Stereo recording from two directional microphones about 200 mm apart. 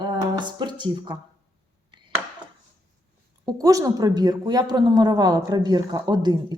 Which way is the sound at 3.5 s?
15° right (ahead or behind).